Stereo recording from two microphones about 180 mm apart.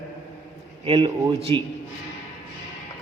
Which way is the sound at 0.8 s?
30° right (ahead or behind).